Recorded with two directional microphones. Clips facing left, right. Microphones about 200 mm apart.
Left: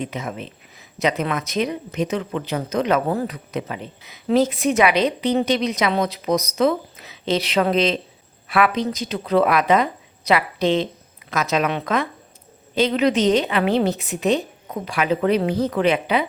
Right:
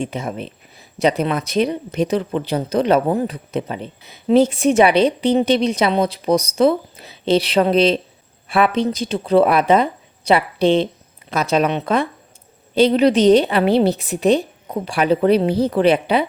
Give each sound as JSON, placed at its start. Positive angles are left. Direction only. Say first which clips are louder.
{"t": 0.0, "sound": "a woman's voice", "louder": "right 4 dB", "side_deg": -30}
{"t": 3.1, "sound": "a woman's voice", "louder": "right 4 dB", "side_deg": -20}
{"t": 3.3, "sound": "a woman's voice", "louder": "right 4 dB", "side_deg": -30}